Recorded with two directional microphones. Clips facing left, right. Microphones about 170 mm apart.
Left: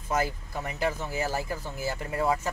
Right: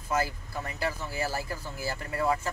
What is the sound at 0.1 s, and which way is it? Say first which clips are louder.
Speech: left 1 dB; 20° left (ahead or behind).